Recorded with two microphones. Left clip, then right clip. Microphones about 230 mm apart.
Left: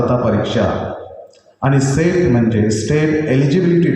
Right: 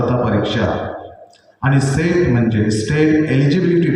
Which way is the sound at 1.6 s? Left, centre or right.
Right.